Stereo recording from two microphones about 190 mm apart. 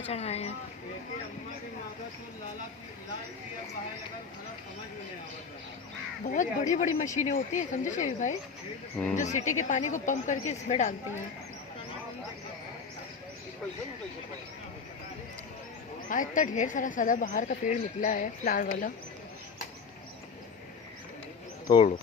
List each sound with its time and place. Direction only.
0.1 s speech: 35° left (ahead or behind)
6.2 s speech: 40° left (ahead or behind)
16.0 s a woman's voice: 45° left (ahead or behind)